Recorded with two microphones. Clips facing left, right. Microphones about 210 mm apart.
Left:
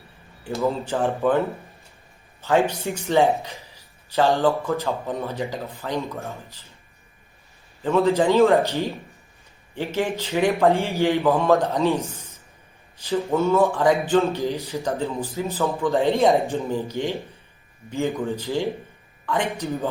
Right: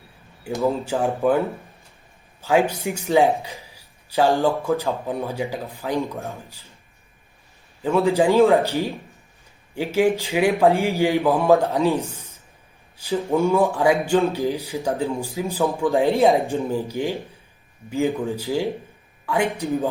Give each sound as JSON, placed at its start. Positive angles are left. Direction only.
{"t": 1.0, "sound": "speech", "side_deg": -10}
{"t": 2.4, "sound": "speech", "side_deg": -10}
{"t": 7.8, "sound": "speech", "side_deg": -10}
{"t": 11.9, "sound": "speech", "side_deg": -30}
{"t": 13.0, "sound": "speech", "side_deg": -10}